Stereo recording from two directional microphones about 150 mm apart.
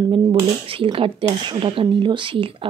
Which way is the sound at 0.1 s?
35° right (ahead or behind).